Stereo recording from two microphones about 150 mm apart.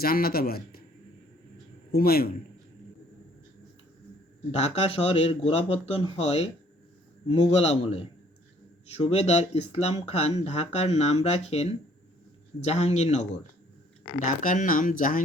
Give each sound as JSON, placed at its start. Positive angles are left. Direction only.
{"t": 0.0, "sound": "a man's voice", "side_deg": 85}
{"t": 1.9, "sound": "a man's voice", "side_deg": 90}
{"t": 4.5, "sound": "speech", "side_deg": 45}